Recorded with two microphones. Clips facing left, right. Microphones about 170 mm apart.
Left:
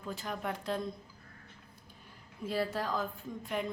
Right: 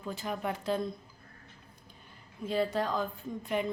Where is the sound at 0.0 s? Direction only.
Centre (ahead or behind).